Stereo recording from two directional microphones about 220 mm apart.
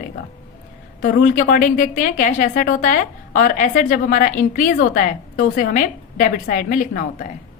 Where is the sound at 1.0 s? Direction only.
40° left (ahead or behind).